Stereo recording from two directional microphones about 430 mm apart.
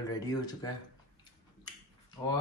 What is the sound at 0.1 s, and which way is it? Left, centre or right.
Speech, centre.